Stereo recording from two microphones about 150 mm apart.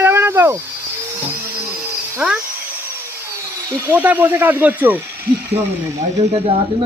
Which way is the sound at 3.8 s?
10° right (ahead or behind).